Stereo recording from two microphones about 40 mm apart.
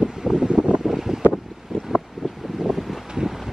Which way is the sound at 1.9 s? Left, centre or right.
Centre.